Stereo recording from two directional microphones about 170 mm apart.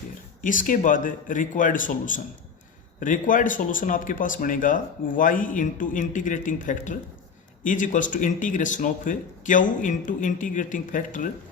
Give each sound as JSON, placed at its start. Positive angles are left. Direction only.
{"t": 0.4, "sound": "speech", "side_deg": 50}